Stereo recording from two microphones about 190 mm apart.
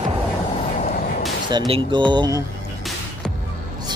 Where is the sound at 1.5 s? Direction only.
25° right (ahead or behind).